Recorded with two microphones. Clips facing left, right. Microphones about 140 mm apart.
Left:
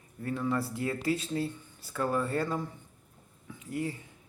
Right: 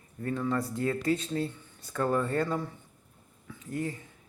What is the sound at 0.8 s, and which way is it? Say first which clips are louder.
Speech: right 2 dB; 10° left (ahead or behind).